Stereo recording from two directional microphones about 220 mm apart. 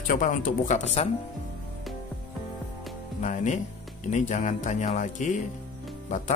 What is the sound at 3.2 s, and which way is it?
Speech, 35° left (ahead or behind).